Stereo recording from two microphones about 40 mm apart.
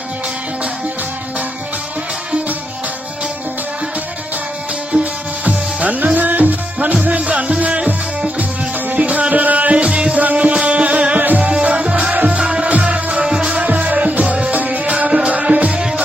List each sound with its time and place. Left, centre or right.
4.9 s music: right
9.7 s music: right
11.5 s music: right
12.1 s music: right
12.4 s music: centre
12.6 s music: right
13.2 s music: centre
13.5 s music: right